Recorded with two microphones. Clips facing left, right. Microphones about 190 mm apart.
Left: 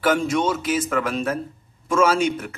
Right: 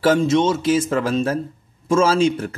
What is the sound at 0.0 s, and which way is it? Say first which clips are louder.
A man's voice: right 4 dB; 25° right (ahead or behind).